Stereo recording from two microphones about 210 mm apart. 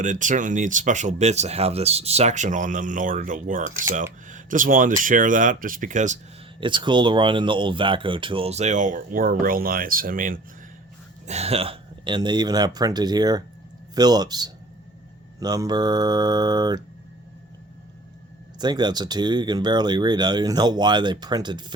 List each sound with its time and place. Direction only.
0.0 s speech: 35° right (ahead or behind)
6.6 s speech: 20° right (ahead or behind); by 10.4 s 40° right (ahead or behind)
11.3 s speech: 30° right (ahead or behind)
18.6 s speech: 20° right (ahead or behind)